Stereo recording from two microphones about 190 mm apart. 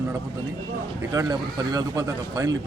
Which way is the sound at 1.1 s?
20° right (ahead or behind).